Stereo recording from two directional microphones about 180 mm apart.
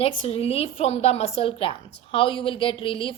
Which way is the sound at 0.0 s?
35° left (ahead or behind).